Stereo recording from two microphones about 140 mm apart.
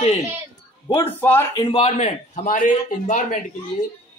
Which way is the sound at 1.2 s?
15° left (ahead or behind).